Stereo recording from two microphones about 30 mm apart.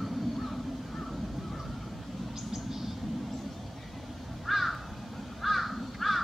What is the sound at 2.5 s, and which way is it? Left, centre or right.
Bird, centre.